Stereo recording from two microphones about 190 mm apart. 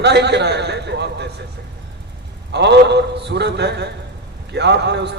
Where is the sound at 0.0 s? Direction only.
60° right (ahead or behind).